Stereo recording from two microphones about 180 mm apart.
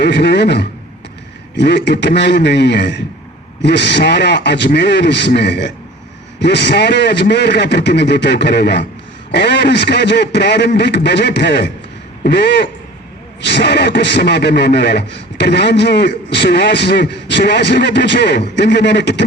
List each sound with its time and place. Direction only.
0.0 s a man's voice: 70° left (ahead or behind)